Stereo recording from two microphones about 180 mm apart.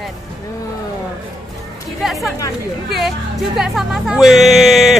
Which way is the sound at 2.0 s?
Centre (ahead or behind).